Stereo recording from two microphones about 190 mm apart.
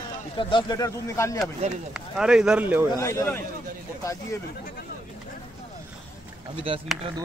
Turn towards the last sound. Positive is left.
turn(degrees=-30)  # may be behind; listen again after turning